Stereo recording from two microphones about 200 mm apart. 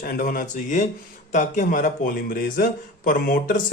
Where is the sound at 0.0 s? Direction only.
45° left (ahead or behind).